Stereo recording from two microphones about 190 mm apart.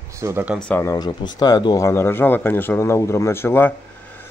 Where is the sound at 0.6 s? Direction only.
10° left (ahead or behind).